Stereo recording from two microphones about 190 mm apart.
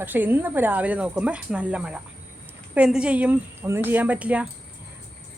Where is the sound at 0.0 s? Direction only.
10° right (ahead or behind).